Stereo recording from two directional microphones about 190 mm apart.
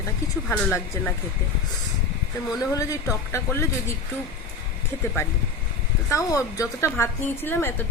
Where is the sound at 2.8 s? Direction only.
15° left (ahead or behind).